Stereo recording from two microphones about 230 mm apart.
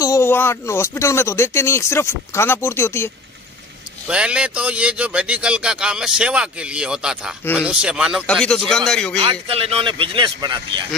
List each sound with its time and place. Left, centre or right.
0.0 s speech: centre
4.1 s speech: centre
9.2 s speech: right